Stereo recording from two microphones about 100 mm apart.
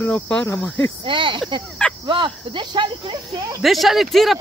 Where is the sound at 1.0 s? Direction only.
55° right (ahead or behind).